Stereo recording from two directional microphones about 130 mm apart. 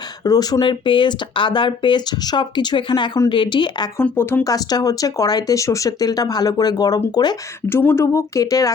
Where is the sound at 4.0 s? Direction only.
15° left (ahead or behind).